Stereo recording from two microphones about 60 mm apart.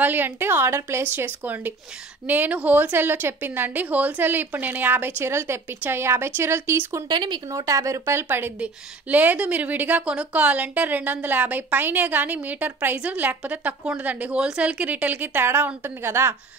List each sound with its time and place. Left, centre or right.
0.0 s a woman's voice: right
1.1 s a woman's voice: right
7.5 s speech: right
9.1 s a woman's voice: right
15.4 s a woman's voice: right